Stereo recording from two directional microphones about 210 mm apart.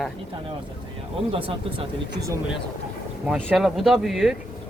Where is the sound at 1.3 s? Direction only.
25° right (ahead or behind).